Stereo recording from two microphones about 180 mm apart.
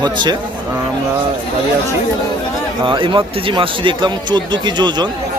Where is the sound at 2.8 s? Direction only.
25° right (ahead or behind).